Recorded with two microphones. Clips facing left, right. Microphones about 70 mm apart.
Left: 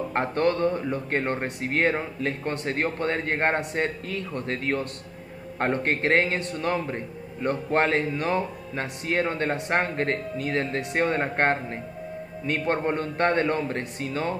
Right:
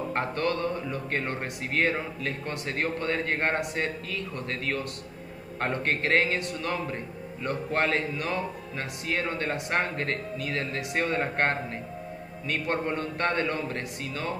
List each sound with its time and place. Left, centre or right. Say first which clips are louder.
0.1 s a man's voice: left 5 dB; left